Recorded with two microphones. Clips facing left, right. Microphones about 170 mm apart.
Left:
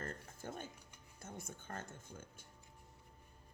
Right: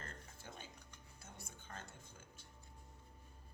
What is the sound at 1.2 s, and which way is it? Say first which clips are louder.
Speech: left 8 dB; 50° left (ahead or behind).